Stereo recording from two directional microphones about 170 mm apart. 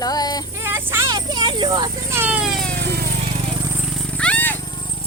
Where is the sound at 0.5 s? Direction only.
10° right (ahead or behind).